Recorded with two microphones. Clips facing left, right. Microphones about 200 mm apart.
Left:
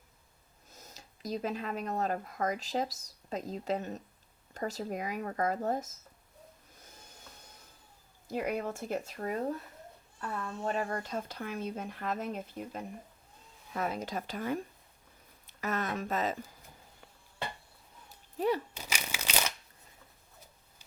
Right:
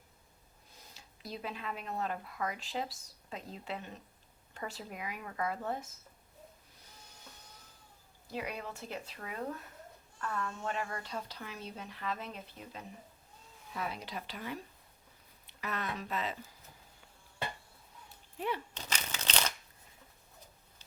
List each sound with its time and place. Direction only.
0.7 s speech: 45° left (ahead or behind)
8.3 s speech: 45° left (ahead or behind)
10.2 s a woman's voice: 25° left (ahead or behind)
10.7 s speech: 40° left (ahead or behind)
18.3 s a child's voice: 40° left (ahead or behind)
18.7 s a sound: 10° left (ahead or behind)